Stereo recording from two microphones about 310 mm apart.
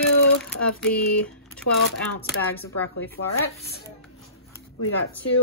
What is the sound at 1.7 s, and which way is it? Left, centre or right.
Speech, left.